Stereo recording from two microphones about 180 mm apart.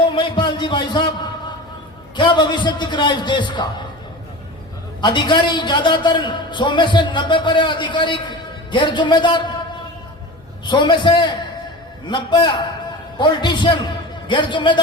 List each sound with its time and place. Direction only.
0.1 s music: 25° left (ahead or behind)
2.1 s a man's voice: 25° left (ahead or behind)
4.9 s a man's voice: 25° left (ahead or behind)
10.7 s a man's voice: 25° left (ahead or behind)